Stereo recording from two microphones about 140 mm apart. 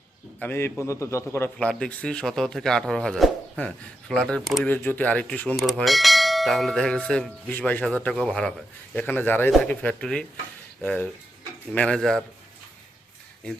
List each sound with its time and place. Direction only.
0.3 s a man's voice: 15° left (ahead or behind)
1.5 s a man's voice: 5° left (ahead or behind)
5.5 s a man's voice: centre (ahead or behind)